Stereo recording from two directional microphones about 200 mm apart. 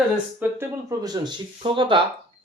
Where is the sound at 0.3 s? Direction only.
15° right (ahead or behind).